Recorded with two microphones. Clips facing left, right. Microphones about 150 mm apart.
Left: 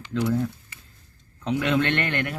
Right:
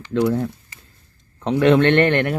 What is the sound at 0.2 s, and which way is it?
Speech, 60° right (ahead or behind).